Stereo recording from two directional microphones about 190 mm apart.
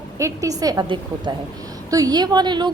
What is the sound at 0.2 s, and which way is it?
A woman's voice, 15° right (ahead or behind).